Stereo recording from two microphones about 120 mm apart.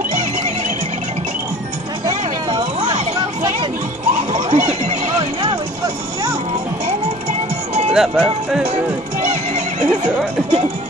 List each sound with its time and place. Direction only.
4.3 s a sound: 65° right (ahead or behind)
7.9 s speech: 5° right (ahead or behind)
9.2 s neigh: 65° right (ahead or behind)